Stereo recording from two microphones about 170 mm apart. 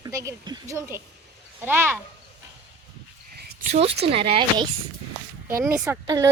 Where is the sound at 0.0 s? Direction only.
20° right (ahead or behind).